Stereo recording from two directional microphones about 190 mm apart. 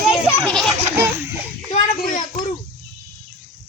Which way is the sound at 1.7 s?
40° left (ahead or behind).